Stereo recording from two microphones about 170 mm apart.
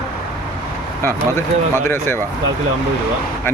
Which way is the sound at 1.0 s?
15° left (ahead or behind).